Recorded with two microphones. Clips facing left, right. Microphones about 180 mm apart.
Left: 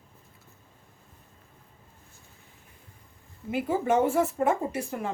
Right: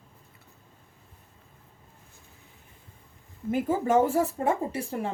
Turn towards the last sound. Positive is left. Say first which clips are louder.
# even
turn(degrees=-30)  # may be behind; listen again after turning